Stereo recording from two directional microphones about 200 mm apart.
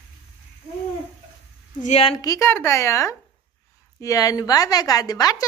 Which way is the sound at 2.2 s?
15° left (ahead or behind).